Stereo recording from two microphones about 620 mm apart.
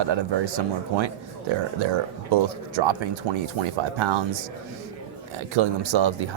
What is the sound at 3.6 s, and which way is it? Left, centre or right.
Speech, right.